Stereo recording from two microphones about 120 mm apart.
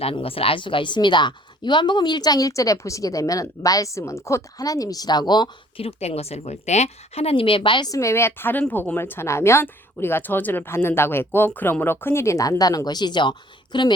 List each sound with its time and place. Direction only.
0.0 s speech: 55° left (ahead or behind); by 5.8 s 35° left (ahead or behind)
5.8 s speech: 60° left (ahead or behind); by 13.9 s 40° left (ahead or behind)